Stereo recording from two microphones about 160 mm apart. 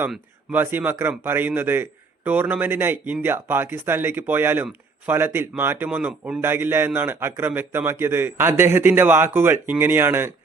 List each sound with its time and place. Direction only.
0.5 s a man's voice: 10° right (ahead or behind)